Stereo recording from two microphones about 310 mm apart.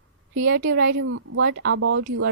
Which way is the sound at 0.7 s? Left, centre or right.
Right.